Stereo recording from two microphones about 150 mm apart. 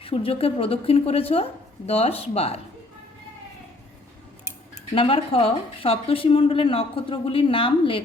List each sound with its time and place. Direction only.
0.0 s a woman's voice: 40° left (ahead or behind)
4.9 s a woman's voice: 35° left (ahead or behind)